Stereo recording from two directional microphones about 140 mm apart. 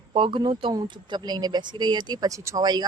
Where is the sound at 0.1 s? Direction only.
40° right (ahead or behind).